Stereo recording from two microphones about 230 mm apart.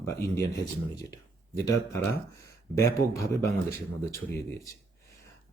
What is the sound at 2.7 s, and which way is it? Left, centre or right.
Speech, centre.